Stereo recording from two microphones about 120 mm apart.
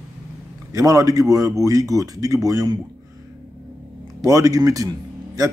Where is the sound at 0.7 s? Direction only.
30° right (ahead or behind).